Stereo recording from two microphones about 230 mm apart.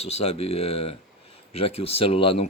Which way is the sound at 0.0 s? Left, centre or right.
Left.